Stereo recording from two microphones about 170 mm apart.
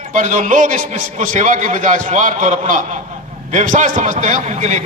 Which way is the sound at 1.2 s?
45° right (ahead or behind).